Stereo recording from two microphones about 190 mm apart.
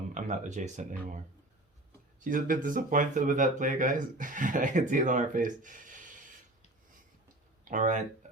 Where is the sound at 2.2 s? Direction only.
45° right (ahead or behind).